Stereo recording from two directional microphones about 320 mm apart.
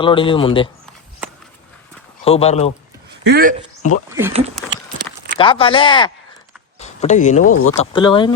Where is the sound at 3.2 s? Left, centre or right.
Right.